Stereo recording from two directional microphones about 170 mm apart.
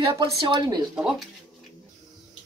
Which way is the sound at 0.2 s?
25° right (ahead or behind).